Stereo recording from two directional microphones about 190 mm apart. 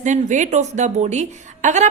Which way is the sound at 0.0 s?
40° right (ahead or behind).